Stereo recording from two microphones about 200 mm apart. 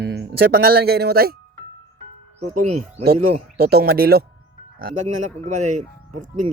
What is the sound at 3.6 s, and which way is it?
Speech, 50° right (ahead or behind).